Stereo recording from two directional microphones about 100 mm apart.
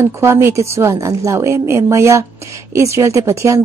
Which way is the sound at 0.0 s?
25° right (ahead or behind).